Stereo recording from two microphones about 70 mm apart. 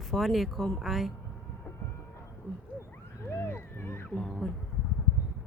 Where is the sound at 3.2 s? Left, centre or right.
Left.